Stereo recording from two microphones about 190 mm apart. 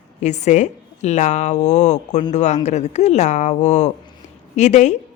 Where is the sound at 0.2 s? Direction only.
35° left (ahead or behind).